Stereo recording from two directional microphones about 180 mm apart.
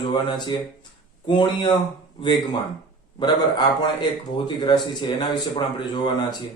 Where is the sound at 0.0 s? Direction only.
25° left (ahead or behind).